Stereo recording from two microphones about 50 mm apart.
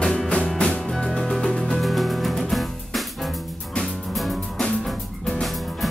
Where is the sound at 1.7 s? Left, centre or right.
Centre.